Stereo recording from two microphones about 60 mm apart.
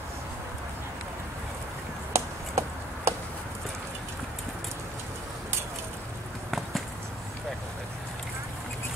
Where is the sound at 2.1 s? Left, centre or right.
Right.